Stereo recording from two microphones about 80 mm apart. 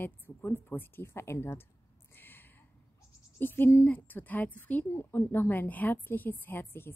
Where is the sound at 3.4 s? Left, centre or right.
Left.